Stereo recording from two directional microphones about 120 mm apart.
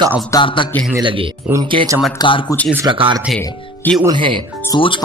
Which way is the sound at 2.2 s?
45° left (ahead or behind).